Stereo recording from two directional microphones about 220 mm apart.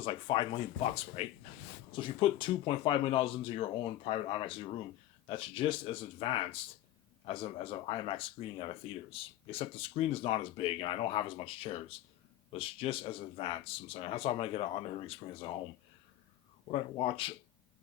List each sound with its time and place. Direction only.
0.0 s speech: 20° left (ahead or behind)
16.7 s speech: 25° left (ahead or behind)